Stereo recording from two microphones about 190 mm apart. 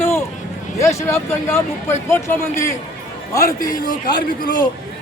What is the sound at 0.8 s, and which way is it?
A man's voice, 15° left (ahead or behind).